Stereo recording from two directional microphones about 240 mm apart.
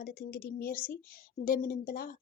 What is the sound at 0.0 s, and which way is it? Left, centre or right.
Speech, left.